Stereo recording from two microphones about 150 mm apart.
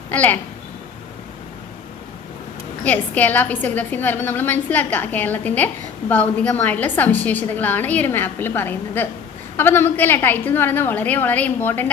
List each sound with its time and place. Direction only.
0.1 s speech: 10° left (ahead or behind)
2.8 s a woman's voice: 10° left (ahead or behind)